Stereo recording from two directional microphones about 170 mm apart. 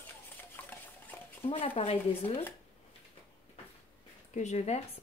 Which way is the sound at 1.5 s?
35° left (ahead or behind).